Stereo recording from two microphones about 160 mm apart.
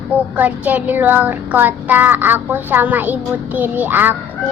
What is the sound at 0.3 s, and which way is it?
Child singing, 10° right (ahead or behind).